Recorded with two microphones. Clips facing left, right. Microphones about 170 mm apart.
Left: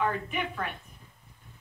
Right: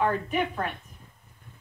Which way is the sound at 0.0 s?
45° right (ahead or behind).